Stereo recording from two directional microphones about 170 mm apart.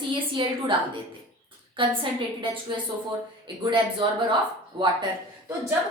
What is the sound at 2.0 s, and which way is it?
A woman's voice, 30° right (ahead or behind).